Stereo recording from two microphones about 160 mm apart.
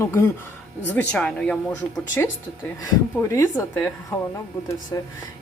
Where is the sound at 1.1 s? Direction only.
5° left (ahead or behind); by 5.1 s 20° left (ahead or behind).